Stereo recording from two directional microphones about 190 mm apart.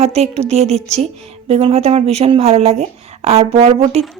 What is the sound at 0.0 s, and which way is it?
A woman's voice, 35° right (ahead or behind).